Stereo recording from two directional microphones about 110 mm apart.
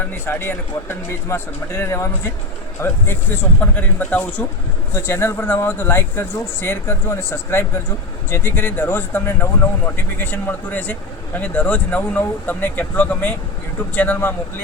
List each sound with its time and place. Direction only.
0.0 s speech: 20° left (ahead or behind)